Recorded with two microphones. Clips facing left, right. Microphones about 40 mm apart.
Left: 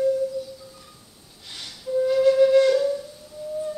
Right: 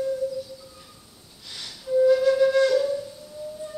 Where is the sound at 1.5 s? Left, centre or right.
Left.